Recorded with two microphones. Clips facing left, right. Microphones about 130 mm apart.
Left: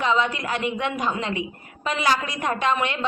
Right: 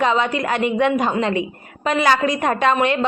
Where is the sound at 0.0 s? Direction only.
55° right (ahead or behind).